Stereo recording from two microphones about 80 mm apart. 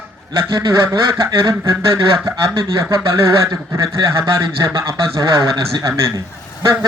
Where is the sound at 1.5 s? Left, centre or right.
Right.